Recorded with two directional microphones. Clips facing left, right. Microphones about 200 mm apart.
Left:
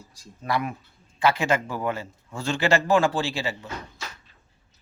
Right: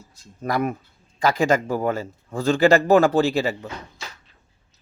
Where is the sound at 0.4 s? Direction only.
45° right (ahead or behind).